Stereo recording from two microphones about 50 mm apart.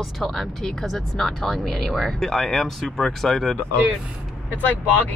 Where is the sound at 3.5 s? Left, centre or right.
Right.